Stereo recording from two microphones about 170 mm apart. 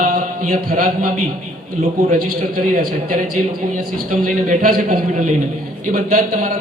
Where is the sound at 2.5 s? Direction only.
55° right (ahead or behind).